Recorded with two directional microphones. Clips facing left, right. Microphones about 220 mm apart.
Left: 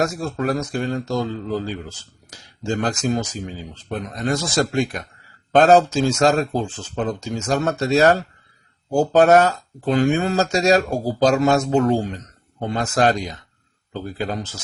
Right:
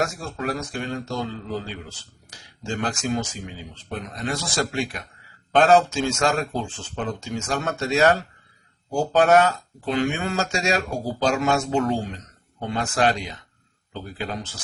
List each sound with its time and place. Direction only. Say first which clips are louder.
0.0 s a man's voice: left 5 dB; 40° left (ahead or behind)